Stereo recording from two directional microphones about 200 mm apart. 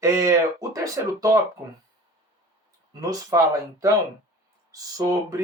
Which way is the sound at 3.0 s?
15° right (ahead or behind).